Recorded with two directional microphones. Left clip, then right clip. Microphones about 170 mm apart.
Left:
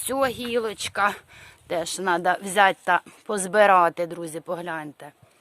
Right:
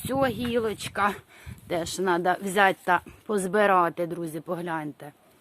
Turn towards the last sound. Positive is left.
turn(degrees=45)  # may be behind; listen again after turning